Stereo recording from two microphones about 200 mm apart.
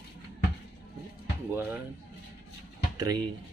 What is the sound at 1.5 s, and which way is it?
Speech, 10° right (ahead or behind).